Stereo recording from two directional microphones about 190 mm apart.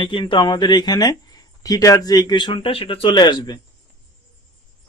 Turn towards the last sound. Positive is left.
turn(degrees=25)  # may be behind; listen again after turning